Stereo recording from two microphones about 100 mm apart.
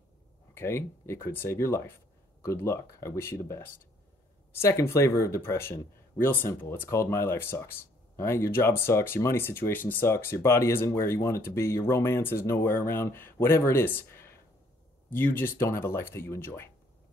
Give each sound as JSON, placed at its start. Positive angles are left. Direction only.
{"t": 0.6, "sound": "speech", "side_deg": 25}